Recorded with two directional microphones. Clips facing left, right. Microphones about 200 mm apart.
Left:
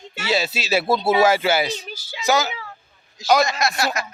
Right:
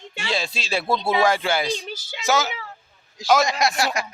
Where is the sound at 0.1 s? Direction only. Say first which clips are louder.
Left 5 dB; 5° left (ahead or behind).